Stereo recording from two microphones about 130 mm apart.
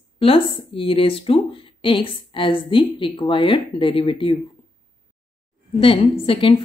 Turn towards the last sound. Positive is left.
turn(degrees=45)  # may be behind; listen again after turning